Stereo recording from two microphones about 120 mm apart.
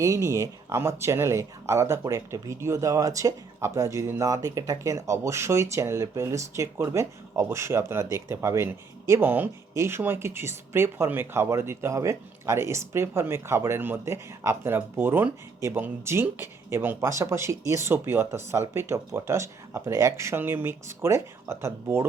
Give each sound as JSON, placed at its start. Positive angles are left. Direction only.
{"t": 0.0, "sound": "speech", "side_deg": -25}